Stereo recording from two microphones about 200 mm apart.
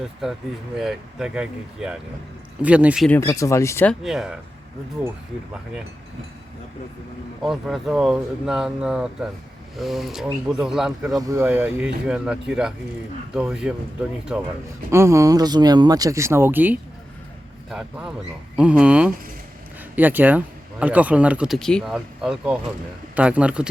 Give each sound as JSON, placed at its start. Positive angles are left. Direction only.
{"t": 0.0, "sound": "speech", "side_deg": 0}
{"t": 3.1, "sound": "speech", "side_deg": 15}
{"t": 4.0, "sound": "speech", "side_deg": 0}
{"t": 7.4, "sound": "speech", "side_deg": 0}
{"t": 11.2, "sound": "speech", "side_deg": -15}